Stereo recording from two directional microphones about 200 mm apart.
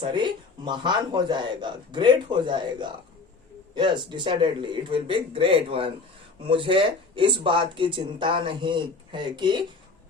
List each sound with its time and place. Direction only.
0.0 s speech: 25° right (ahead or behind)